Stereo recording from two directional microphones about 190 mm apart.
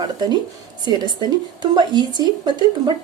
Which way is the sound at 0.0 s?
20° right (ahead or behind).